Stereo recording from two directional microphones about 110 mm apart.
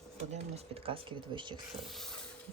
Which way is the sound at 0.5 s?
60° right (ahead or behind).